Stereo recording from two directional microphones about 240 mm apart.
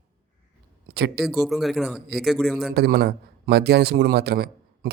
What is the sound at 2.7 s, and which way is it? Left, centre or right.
A man's voice, right.